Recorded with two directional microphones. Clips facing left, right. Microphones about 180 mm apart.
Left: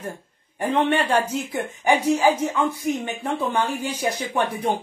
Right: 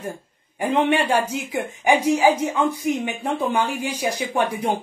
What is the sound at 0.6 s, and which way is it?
A woman's voice, 10° right (ahead or behind).